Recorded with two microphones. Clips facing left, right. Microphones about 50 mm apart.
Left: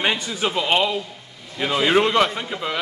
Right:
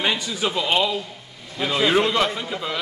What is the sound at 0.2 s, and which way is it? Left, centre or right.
A man's voice, left.